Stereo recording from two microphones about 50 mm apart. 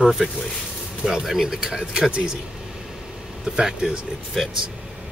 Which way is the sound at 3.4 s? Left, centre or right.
Centre.